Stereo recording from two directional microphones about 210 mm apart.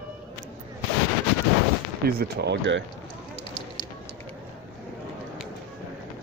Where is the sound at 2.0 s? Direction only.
50° right (ahead or behind).